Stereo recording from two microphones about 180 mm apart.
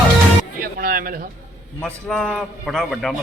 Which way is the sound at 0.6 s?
55° right (ahead or behind).